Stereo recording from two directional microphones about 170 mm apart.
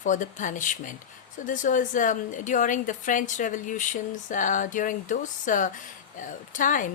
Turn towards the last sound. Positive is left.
turn(degrees=50)  # may be behind; listen again after turning